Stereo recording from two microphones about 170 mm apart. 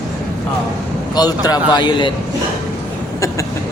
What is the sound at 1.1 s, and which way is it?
A man's voice, 25° left (ahead or behind).